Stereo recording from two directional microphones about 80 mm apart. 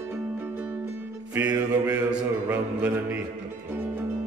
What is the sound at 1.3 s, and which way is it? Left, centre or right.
Mantra, centre.